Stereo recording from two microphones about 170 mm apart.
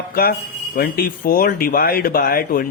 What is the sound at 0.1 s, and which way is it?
A man's voice, 60° left (ahead or behind).